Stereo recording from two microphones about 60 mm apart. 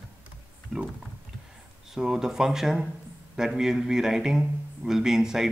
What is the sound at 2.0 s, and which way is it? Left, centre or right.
Speech, centre.